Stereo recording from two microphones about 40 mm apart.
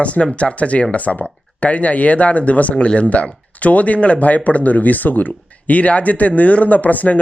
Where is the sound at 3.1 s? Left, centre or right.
Left.